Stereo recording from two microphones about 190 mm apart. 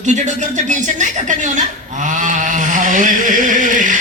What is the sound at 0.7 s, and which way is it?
A man's voice, 40° right (ahead or behind).